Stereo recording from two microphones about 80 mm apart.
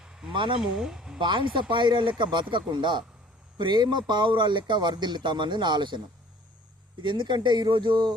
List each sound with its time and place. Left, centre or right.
0.0 s a sound: centre
0.3 s speech: right
0.6 s speech: centre
1.2 s speech: right
3.6 s speech: right
7.0 s speech: right